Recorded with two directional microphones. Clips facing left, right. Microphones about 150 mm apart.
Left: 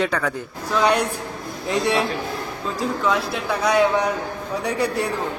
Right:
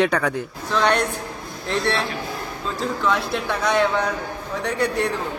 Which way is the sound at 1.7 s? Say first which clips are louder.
Left 2 dB; 15° left (ahead or behind).